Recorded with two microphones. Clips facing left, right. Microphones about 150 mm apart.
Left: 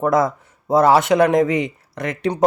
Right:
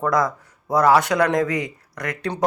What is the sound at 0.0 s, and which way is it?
Speech, 25° left (ahead or behind).